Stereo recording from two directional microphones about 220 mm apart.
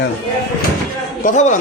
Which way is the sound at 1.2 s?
35° left (ahead or behind).